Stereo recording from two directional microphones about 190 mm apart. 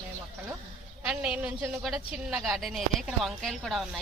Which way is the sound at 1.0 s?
5° right (ahead or behind).